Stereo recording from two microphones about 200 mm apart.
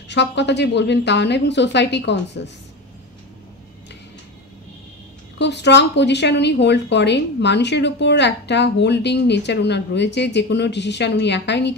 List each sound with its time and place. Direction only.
0.1 s a woman's voice: 60° left (ahead or behind)
5.4 s a woman's voice: 60° left (ahead or behind)